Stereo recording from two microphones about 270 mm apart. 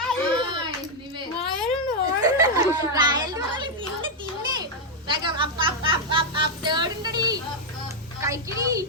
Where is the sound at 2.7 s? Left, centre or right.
Centre.